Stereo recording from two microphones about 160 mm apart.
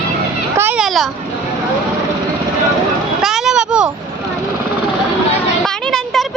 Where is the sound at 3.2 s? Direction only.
Centre (ahead or behind).